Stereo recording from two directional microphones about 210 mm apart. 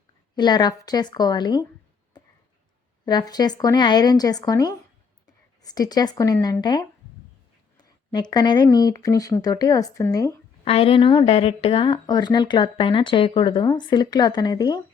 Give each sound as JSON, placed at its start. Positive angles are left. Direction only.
{"t": 0.3, "sound": "speech", "side_deg": 20}
{"t": 2.1, "sound": "a sound", "side_deg": 20}
{"t": 3.1, "sound": "speech", "side_deg": 20}
{"t": 10.7, "sound": "speech", "side_deg": 25}